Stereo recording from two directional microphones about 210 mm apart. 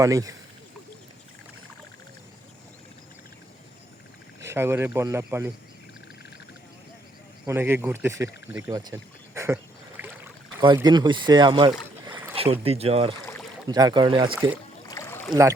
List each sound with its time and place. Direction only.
0.0 s speech: 15° right (ahead or behind)
4.4 s speech: 10° right (ahead or behind)
7.4 s speech: 10° right (ahead or behind)
9.3 s a sound: 15° right (ahead or behind)
10.0 s boat: 10° right (ahead or behind)
10.6 s speech: 20° right (ahead or behind)
14.8 s rowboat: 15° left (ahead or behind)